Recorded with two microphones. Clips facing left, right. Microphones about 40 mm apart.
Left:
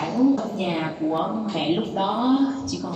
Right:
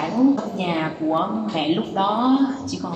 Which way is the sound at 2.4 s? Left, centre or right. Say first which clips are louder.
Right 1 dB; right.